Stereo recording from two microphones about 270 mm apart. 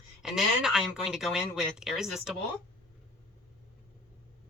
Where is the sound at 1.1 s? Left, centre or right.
Centre.